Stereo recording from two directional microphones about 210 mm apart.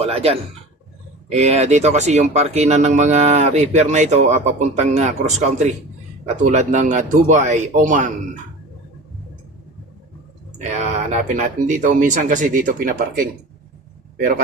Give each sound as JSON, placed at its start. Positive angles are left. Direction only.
{"t": 0.0, "sound": "speech", "side_deg": -30}
{"t": 10.8, "sound": "speech", "side_deg": -35}